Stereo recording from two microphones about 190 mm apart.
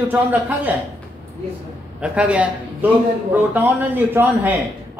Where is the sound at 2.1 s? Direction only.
5° right (ahead or behind).